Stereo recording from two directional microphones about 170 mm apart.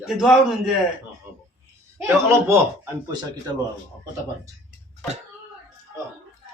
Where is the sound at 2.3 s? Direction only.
15° right (ahead or behind).